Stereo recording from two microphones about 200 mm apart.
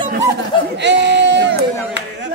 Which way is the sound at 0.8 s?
60° right (ahead or behind).